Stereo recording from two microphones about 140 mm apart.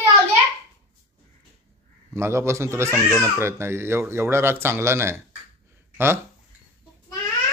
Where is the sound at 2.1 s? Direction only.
20° right (ahead or behind).